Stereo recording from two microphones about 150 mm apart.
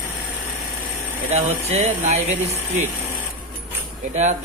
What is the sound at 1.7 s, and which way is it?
Speech, 45° right (ahead or behind).